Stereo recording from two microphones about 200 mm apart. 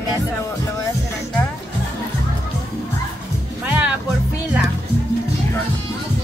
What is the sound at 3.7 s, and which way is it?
Speech, 5° right (ahead or behind).